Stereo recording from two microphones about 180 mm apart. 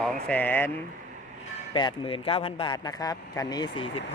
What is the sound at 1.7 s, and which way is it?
Speech, 25° left (ahead or behind).